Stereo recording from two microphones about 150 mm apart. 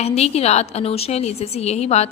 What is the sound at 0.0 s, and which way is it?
A woman's voice, 45° left (ahead or behind).